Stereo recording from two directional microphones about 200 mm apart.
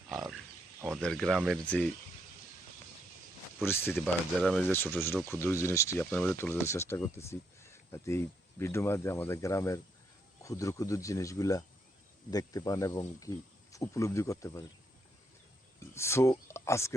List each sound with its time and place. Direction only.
0.1 s wild animals: centre (ahead or behind)
0.9 s speech: centre (ahead or behind)
3.7 s speech: 10° left (ahead or behind)
16.0 s speech: 15° left (ahead or behind)